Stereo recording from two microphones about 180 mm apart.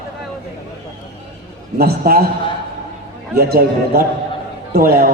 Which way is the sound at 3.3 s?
60° right (ahead or behind).